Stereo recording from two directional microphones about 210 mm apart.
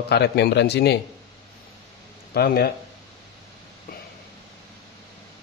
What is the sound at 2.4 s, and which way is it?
Speech, 50° left (ahead or behind).